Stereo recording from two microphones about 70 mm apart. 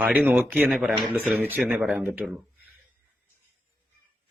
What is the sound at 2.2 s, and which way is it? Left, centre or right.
Speech, centre.